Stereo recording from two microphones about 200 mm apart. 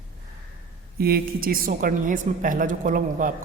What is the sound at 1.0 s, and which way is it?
A woman's voice, 50° right (ahead or behind).